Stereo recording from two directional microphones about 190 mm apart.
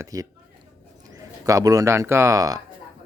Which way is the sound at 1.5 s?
15° right (ahead or behind).